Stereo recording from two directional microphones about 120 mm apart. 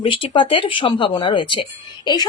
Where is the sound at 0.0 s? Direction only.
45° left (ahead or behind).